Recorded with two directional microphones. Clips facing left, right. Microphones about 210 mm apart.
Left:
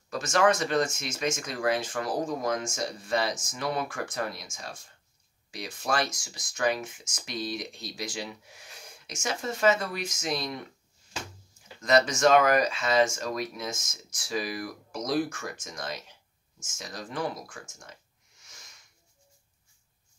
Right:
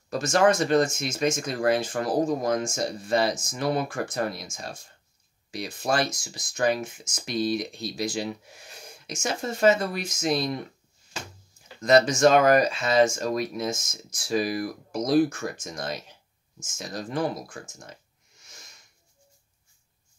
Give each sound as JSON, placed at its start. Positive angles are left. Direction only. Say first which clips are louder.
{"t": 0.1, "sound": "speech", "louder": "right 3 dB", "side_deg": -35}
{"t": 11.8, "sound": "speech", "louder": "right 4 dB", "side_deg": -30}